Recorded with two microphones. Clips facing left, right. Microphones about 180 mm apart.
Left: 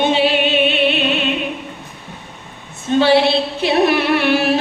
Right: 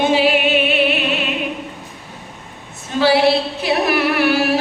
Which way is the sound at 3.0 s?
25° left (ahead or behind).